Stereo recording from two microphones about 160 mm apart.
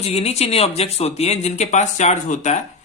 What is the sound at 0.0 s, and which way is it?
Speech, 40° left (ahead or behind).